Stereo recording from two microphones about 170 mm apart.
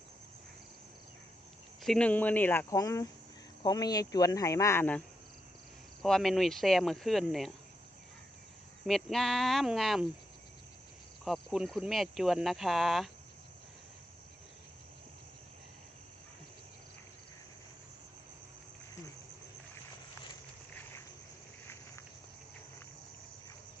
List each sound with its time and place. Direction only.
1.8 s speech: 5° left (ahead or behind)
8.9 s speech: centre (ahead or behind)
11.3 s speech: centre (ahead or behind)